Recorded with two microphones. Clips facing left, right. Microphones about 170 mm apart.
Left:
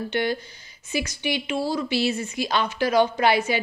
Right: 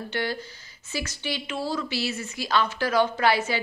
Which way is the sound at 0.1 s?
20° left (ahead or behind).